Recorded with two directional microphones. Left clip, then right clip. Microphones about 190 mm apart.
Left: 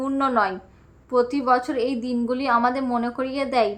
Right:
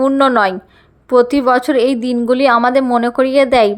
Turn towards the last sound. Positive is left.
turn(degrees=-40)  # may be behind; listen again after turning